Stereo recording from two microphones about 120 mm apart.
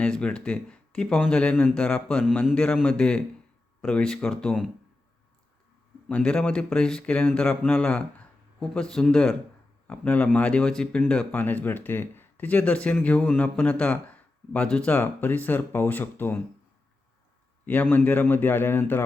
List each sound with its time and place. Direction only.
0.0 s speech: 10° left (ahead or behind)
6.1 s speech: 10° left (ahead or behind)
17.7 s speech: 15° left (ahead or behind)